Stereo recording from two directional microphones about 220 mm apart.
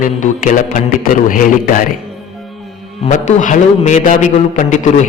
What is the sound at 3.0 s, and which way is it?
A man's voice, 35° left (ahead or behind).